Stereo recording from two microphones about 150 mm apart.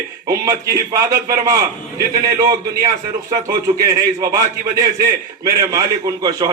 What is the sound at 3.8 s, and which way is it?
Speech, 25° right (ahead or behind).